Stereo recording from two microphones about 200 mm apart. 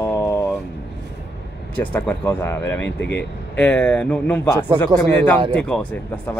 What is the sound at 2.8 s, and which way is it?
Speech, 60° left (ahead or behind).